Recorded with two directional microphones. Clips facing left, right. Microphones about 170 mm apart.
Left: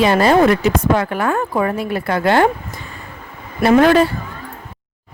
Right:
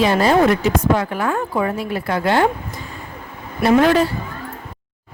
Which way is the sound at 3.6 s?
60° left (ahead or behind).